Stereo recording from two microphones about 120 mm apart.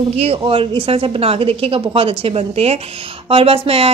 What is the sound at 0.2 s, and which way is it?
A woman's voice, 50° right (ahead or behind).